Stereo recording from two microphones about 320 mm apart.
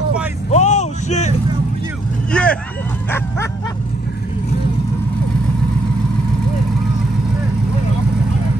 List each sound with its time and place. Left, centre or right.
0.5 s a sound: left
2.3 s vehicle: centre
3.1 s bow-wow: centre